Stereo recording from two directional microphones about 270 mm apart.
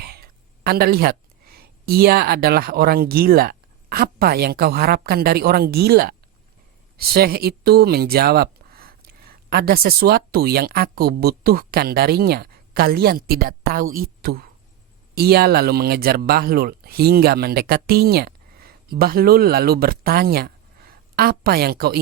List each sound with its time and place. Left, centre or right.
0.0 s speech: right